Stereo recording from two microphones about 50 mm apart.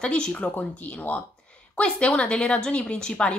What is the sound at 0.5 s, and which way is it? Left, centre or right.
Speech, left.